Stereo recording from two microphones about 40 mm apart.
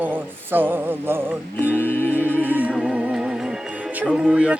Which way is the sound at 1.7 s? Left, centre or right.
Left.